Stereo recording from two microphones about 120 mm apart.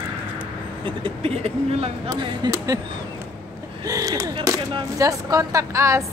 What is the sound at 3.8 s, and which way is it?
Speech, 30° right (ahead or behind).